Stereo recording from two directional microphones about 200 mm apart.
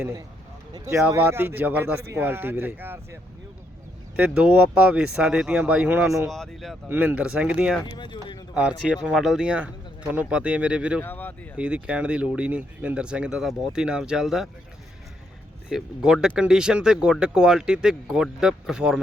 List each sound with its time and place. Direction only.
0.9 s speech: 10° right (ahead or behind)
4.2 s speech: 5° right (ahead or behind)
6.3 s speech: centre (ahead or behind)
7.9 s speech: 20° left (ahead or behind)
8.5 s speech: 5° right (ahead or behind)
11.0 s speech: 10° left (ahead or behind)
11.5 s speech: 5° right (ahead or behind)
15.7 s speech: 5° right (ahead or behind)